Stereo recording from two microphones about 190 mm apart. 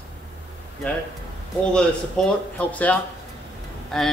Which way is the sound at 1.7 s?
5° left (ahead or behind).